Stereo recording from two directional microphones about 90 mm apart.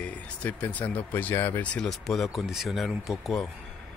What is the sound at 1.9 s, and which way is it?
Speech, centre (ahead or behind).